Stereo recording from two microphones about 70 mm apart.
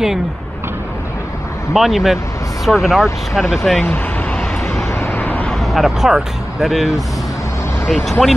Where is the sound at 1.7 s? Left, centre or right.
Centre.